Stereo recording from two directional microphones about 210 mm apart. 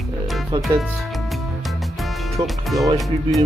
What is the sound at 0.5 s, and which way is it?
Speech, 20° right (ahead or behind).